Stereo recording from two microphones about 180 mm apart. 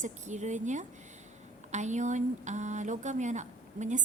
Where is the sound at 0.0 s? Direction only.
40° right (ahead or behind).